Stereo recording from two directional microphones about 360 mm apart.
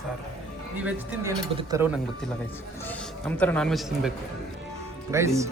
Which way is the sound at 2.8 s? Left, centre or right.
Centre.